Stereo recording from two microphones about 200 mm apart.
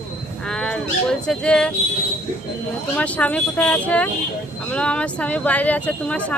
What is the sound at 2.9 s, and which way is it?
Speech, 5° left (ahead or behind).